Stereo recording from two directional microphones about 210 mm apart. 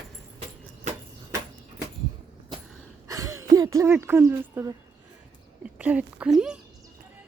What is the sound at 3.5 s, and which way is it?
Speech, 15° right (ahead or behind).